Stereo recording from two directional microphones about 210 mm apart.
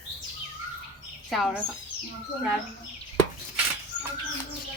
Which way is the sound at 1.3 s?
Centre (ahead or behind).